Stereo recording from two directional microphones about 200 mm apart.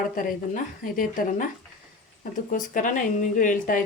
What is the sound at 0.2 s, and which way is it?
Speech, 45° left (ahead or behind).